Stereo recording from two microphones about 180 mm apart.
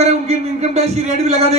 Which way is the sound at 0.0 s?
35° right (ahead or behind).